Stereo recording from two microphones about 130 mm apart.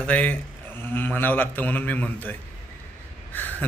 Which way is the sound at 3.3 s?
15° left (ahead or behind).